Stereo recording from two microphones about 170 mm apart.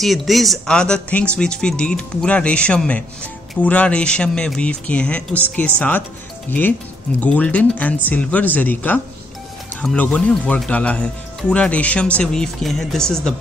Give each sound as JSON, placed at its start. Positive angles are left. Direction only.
{"t": 0.0, "sound": "speech", "side_deg": 0}
{"t": 7.2, "sound": "speech", "side_deg": 10}